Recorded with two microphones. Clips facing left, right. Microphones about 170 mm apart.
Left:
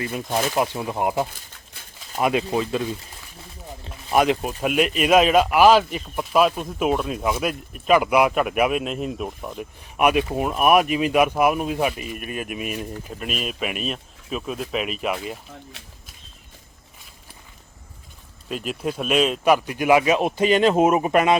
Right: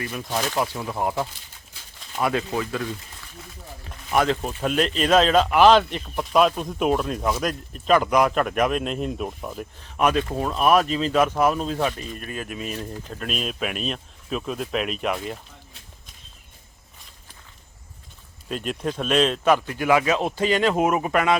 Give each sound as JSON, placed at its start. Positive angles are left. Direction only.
{"t": 0.0, "sound": "speech", "side_deg": 20}
{"t": 4.1, "sound": "speech", "side_deg": 15}
{"t": 9.8, "sound": "speech", "side_deg": 10}
{"t": 18.4, "sound": "speech", "side_deg": 5}